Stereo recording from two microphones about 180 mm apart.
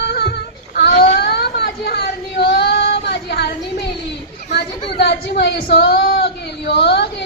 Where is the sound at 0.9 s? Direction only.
40° left (ahead or behind).